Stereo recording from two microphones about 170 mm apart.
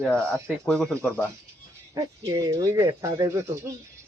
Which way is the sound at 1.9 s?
20° right (ahead or behind).